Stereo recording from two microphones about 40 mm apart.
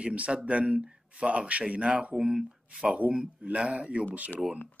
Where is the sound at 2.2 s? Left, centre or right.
Centre.